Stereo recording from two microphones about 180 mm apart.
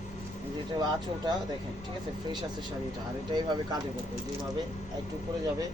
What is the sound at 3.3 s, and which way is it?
Speech, 25° right (ahead or behind).